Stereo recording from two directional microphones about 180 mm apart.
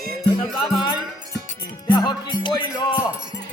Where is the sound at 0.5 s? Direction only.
25° left (ahead or behind).